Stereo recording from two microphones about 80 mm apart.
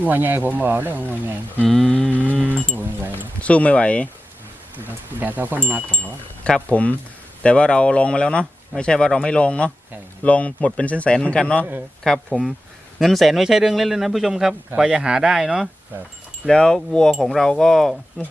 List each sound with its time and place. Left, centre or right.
0.0 s speech: right
1.6 s a sound: centre
2.7 s speech: right
3.4 s speech: centre
4.8 s speech: right
5.9 s a man's voice: centre
16.5 s speech: centre